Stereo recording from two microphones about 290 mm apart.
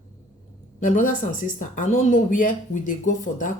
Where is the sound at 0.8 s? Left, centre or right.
Left.